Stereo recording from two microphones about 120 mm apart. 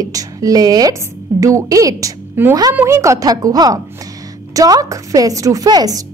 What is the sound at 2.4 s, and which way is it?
A woman's voice, 20° right (ahead or behind).